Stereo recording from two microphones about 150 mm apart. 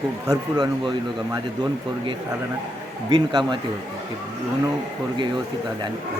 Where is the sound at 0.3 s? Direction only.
25° right (ahead or behind).